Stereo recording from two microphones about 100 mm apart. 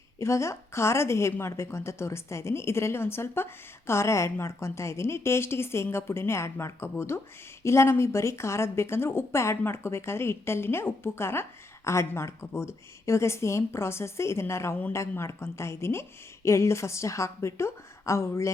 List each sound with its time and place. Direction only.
0.2 s speech: 30° left (ahead or behind)